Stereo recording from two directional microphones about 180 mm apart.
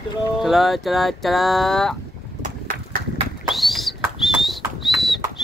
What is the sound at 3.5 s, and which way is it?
Bird, centre (ahead or behind).